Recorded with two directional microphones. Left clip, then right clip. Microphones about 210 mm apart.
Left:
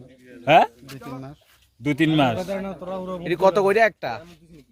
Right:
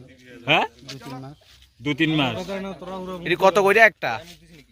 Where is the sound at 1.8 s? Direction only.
55° left (ahead or behind).